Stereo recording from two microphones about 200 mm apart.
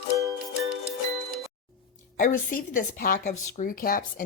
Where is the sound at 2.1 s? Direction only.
45° left (ahead or behind).